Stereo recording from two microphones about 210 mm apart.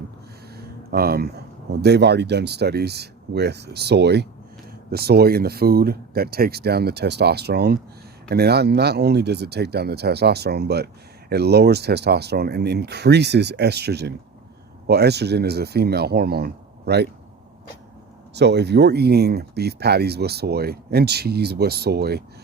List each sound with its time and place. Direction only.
0.5 s a sound: 45° right (ahead or behind)
1.8 s speech: 55° right (ahead or behind)
18.3 s speech: 55° right (ahead or behind)